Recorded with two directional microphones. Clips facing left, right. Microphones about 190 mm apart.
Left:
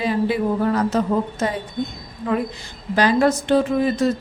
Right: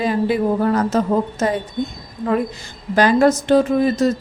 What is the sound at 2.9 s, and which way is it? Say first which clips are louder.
A woman's voice: right 3 dB; 45° right (ahead or behind).